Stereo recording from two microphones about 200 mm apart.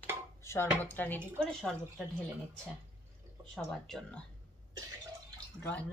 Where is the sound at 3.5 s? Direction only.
Centre (ahead or behind).